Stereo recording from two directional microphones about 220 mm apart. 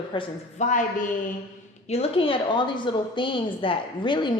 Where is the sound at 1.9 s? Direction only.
25° left (ahead or behind).